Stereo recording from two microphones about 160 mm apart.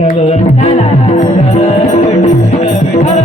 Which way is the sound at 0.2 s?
40° left (ahead or behind).